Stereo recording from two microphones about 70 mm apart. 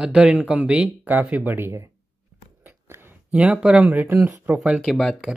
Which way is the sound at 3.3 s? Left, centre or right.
Centre.